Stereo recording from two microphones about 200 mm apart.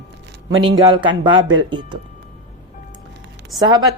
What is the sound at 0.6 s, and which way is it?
A woman's voice, 25° right (ahead or behind).